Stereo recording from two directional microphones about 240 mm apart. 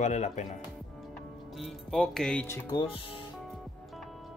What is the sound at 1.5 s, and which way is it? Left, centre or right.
Speech, centre.